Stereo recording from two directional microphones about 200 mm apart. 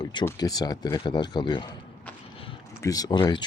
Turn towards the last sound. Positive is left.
turn(degrees=20)  # may be behind; listen again after turning